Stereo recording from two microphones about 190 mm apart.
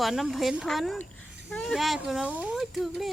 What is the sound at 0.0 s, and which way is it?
Speech, centre (ahead or behind).